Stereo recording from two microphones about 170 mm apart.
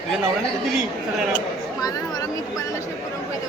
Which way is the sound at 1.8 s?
20° left (ahead or behind).